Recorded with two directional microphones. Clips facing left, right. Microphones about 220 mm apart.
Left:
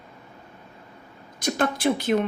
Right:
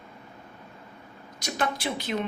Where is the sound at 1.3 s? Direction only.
50° left (ahead or behind).